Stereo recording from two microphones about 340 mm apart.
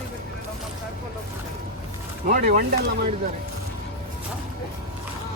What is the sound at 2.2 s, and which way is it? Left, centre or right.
Speech, right.